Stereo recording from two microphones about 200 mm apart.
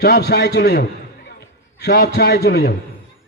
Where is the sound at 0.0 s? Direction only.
55° left (ahead or behind).